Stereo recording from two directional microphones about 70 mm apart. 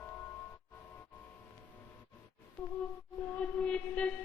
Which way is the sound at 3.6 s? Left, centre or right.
Centre.